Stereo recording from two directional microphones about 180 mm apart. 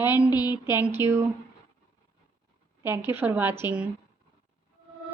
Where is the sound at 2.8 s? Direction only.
10° right (ahead or behind).